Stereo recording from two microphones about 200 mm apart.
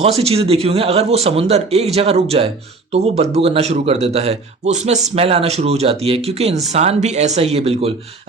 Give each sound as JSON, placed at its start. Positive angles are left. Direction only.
{"t": 0.0, "sound": "speech", "side_deg": -30}